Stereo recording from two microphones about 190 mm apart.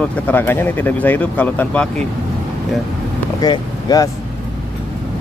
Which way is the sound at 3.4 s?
20° left (ahead or behind).